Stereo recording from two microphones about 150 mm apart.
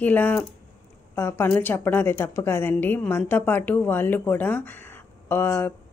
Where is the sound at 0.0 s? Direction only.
10° left (ahead or behind).